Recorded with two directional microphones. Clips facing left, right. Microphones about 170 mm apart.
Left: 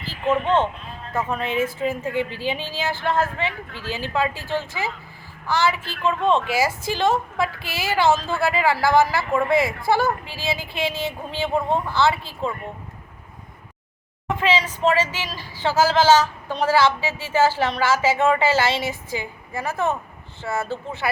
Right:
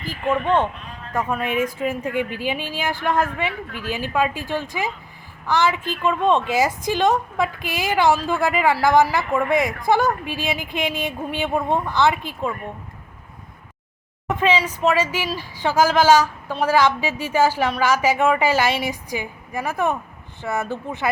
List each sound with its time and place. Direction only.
0.4 s speech: 10° right (ahead or behind)
14.3 s speech: 20° right (ahead or behind)